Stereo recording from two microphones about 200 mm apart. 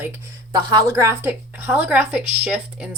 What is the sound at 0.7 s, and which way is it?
A woman's voice, 15° right (ahead or behind).